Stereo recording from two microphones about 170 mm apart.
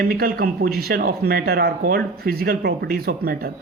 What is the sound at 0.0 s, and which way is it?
Speech, 60° right (ahead or behind).